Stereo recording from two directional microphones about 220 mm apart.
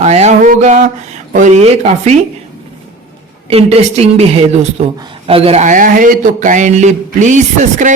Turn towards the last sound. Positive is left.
turn(degrees=-35)  # may be behind; listen again after turning